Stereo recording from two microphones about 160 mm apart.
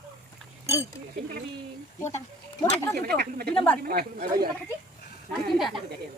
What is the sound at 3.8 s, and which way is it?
Speech, 70° right (ahead or behind).